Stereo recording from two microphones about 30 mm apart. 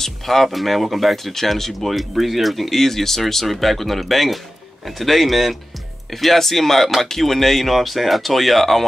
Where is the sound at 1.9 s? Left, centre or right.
Centre.